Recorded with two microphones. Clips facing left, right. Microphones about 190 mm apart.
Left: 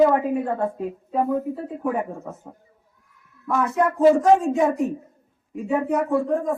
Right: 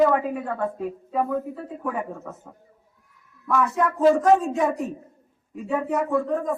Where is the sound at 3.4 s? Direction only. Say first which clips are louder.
Even; 25° left (ahead or behind).